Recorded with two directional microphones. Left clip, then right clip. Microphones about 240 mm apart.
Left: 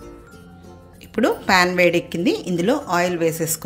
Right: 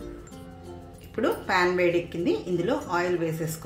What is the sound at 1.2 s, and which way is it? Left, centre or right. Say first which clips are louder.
A woman's voice: left 7 dB; left.